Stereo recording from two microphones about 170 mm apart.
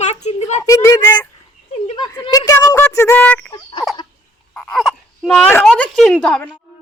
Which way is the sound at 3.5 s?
30° left (ahead or behind).